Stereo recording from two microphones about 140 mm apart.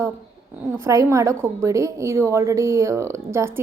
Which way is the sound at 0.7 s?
20° right (ahead or behind).